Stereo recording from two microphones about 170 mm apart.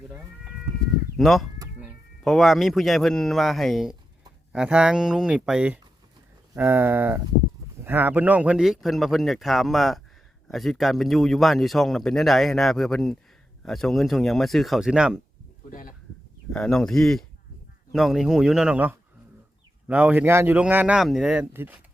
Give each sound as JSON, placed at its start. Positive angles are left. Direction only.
{"t": 1.1, "sound": "a man's voice", "side_deg": 0}
{"t": 15.7, "sound": "speech", "side_deg": 50}
{"t": 16.5, "sound": "speech", "side_deg": 5}